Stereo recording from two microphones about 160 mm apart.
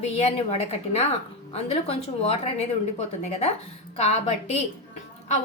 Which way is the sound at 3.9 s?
40° left (ahead or behind).